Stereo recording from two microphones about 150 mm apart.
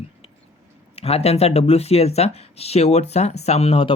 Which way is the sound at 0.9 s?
40° left (ahead or behind).